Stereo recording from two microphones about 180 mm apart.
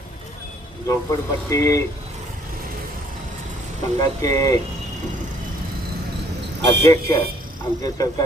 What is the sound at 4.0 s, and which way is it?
Speech, 20° left (ahead or behind).